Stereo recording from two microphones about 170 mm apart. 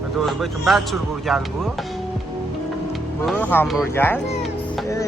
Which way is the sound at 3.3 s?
10° left (ahead or behind).